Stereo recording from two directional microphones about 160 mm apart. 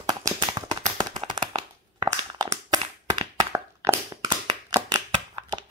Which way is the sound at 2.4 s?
30° right (ahead or behind).